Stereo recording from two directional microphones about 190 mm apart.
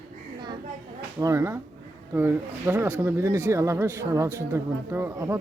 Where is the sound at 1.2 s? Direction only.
15° right (ahead or behind).